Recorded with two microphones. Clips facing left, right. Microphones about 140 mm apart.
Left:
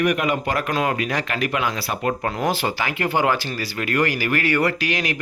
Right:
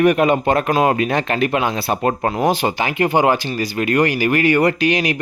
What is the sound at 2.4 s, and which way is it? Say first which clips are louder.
Speech: right 4 dB; 20° right (ahead or behind).